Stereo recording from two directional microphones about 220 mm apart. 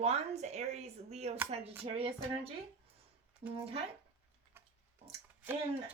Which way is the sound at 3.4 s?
30° right (ahead or behind).